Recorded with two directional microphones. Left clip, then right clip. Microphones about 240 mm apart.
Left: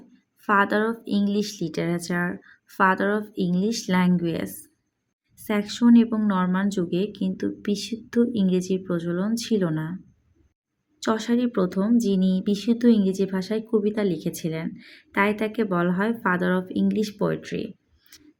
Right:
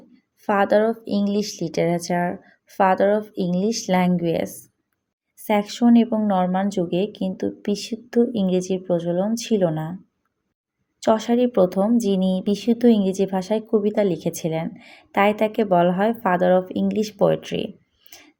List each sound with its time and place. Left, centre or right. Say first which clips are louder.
0.4 s speech: right 3 dB; centre
1.0 s speech: right 3 dB; left
1.5 s a woman's voice: right 6 dB; centre
11.0 s a woman's voice: right 6 dB; centre